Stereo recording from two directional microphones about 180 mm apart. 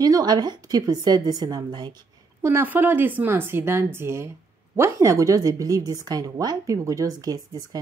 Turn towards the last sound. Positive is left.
turn(degrees=-20)  # may be behind; listen again after turning